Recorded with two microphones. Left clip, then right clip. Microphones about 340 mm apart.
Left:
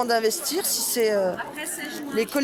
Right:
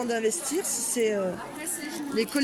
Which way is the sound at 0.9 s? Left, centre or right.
Left.